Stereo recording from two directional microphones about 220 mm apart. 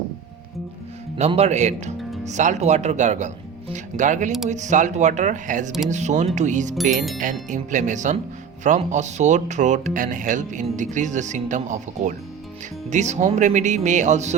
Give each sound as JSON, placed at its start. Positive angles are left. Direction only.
{"t": 1.1, "sound": "speech", "side_deg": -25}